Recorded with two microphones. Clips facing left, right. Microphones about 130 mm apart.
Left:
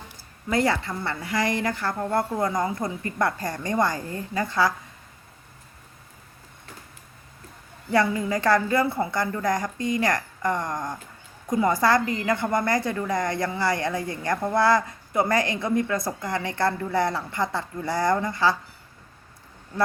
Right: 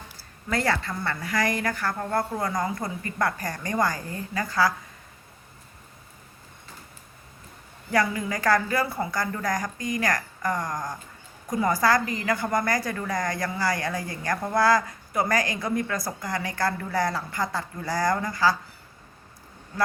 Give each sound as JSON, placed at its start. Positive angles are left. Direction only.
{"t": 0.5, "sound": "a woman's voice", "side_deg": 20}
{"t": 7.9, "sound": "a woman's voice", "side_deg": 25}